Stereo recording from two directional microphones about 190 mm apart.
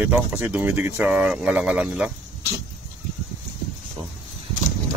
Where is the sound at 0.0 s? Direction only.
10° right (ahead or behind).